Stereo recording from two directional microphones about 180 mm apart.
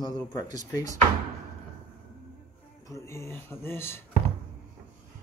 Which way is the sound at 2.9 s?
15° left (ahead or behind).